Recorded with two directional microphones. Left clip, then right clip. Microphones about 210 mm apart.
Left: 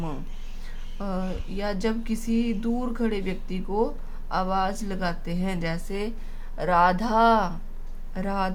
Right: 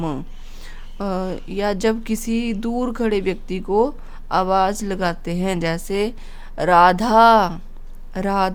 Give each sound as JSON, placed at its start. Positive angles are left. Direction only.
{"t": 0.6, "sound": "speech", "side_deg": -50}